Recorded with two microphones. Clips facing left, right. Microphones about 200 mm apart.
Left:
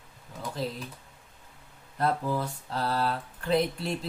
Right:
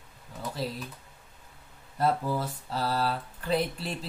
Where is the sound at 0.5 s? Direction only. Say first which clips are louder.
Left 1 dB; 5° right (ahead or behind).